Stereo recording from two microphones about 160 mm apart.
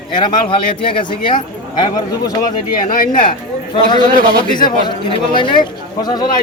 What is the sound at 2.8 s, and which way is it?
Speech, 60° left (ahead or behind).